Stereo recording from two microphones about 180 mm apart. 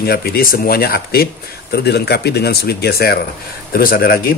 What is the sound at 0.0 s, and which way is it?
Speech, 60° left (ahead or behind).